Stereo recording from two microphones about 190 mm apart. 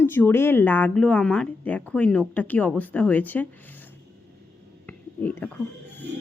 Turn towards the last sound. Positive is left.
turn(degrees=10)  # may be behind; listen again after turning